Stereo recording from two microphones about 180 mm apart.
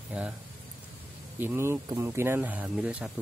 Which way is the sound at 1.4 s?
10° right (ahead or behind).